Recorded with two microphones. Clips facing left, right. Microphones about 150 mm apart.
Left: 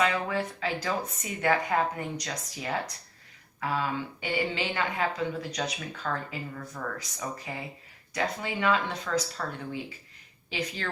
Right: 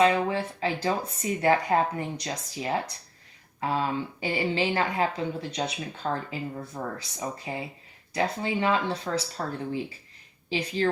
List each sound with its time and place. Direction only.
0.0 s a woman's voice: 30° right (ahead or behind)
10.5 s speech: 30° right (ahead or behind)